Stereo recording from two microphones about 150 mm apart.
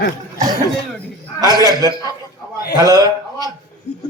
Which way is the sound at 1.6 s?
25° right (ahead or behind).